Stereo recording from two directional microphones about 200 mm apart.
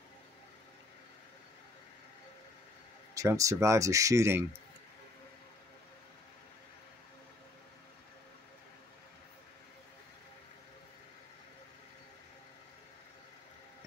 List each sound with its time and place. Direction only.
3.2 s speech: 15° right (ahead or behind)